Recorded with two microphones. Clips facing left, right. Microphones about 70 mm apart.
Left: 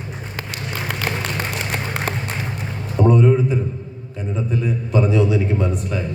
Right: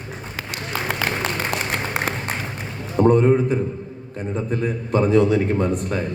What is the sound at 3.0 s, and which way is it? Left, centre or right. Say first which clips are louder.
A man's voice: even; right.